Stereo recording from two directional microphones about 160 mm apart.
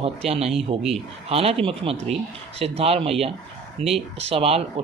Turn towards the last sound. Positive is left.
turn(degrees=-40)  # may be behind; listen again after turning